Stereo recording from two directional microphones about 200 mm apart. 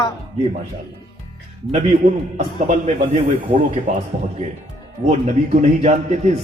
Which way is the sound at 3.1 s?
35° right (ahead or behind).